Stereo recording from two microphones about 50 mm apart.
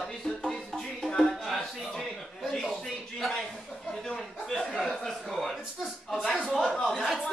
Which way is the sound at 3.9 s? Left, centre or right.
Centre.